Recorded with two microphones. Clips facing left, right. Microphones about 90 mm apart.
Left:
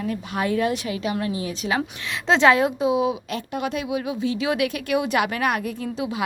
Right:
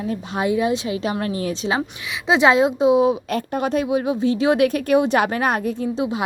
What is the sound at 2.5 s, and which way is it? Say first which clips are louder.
Speech: right 3 dB; 20° right (ahead or behind).